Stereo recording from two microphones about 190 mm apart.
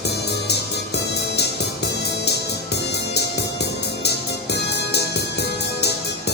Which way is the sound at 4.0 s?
60° left (ahead or behind).